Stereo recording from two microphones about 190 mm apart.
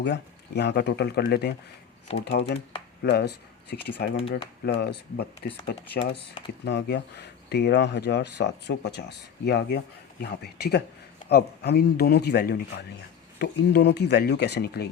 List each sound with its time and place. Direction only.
0.0 s speech: 65° left (ahead or behind)